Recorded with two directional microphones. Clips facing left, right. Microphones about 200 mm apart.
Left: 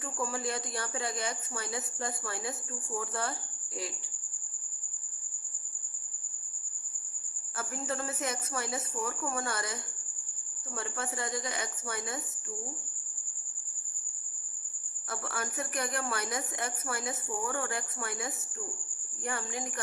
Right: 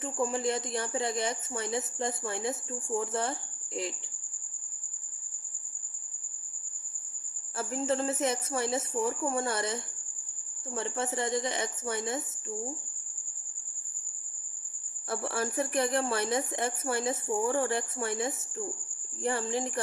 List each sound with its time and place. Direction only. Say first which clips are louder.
0.0 s speech: right 5 dB; 25° right (ahead or behind)
7.5 s speech: right 6 dB; 25° right (ahead or behind)
15.1 s speech: right 6 dB; 30° right (ahead or behind)